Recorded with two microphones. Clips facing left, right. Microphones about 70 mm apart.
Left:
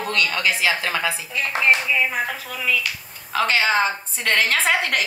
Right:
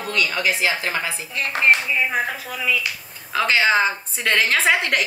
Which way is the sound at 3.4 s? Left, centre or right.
Centre.